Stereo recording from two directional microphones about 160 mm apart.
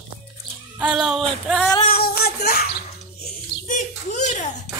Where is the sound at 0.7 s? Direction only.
5° right (ahead or behind).